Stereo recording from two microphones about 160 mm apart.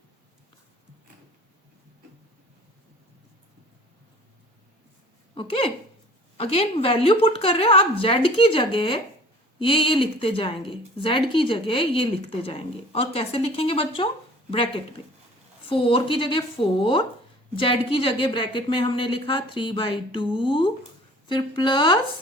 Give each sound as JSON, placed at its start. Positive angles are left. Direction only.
{"t": 5.3, "sound": "a woman's voice", "side_deg": 35}